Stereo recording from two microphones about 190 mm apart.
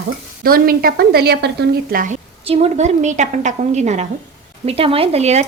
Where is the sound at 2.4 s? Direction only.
30° right (ahead or behind).